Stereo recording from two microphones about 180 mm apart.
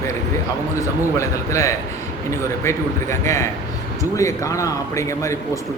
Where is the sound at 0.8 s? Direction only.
15° left (ahead or behind).